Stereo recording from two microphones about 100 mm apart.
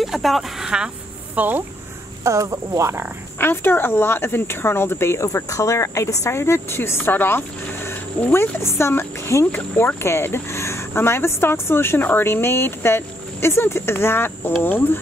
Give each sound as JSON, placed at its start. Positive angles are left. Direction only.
{"t": 0.0, "sound": "speech", "side_deg": 0}
{"t": 2.2, "sound": "cricket", "side_deg": -30}
{"t": 3.3, "sound": "speech", "side_deg": 20}